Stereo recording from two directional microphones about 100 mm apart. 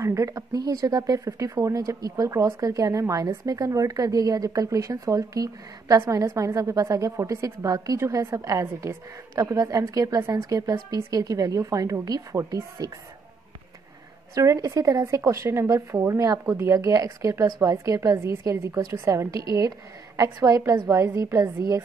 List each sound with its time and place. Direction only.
0.0 s speech: 30° right (ahead or behind)
14.3 s speech: 30° right (ahead or behind)